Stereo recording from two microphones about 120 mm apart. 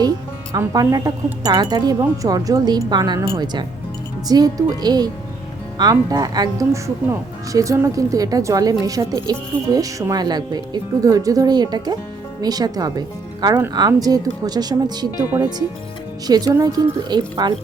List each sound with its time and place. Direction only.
0.5 s speech: 30° right (ahead or behind)